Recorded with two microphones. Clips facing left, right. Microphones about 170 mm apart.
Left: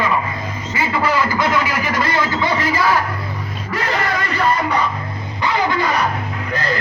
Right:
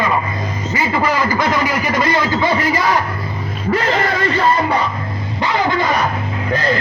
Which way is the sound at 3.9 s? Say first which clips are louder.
Right 4 dB; 25° right (ahead or behind).